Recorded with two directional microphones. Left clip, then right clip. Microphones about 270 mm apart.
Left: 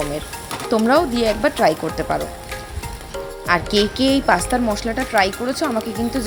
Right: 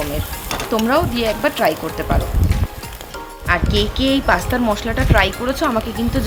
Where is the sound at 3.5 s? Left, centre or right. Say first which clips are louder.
Left 1 dB; centre.